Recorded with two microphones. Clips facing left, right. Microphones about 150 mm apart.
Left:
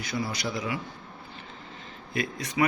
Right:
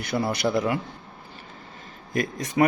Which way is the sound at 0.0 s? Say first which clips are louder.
Right 7 dB; 60° right (ahead or behind).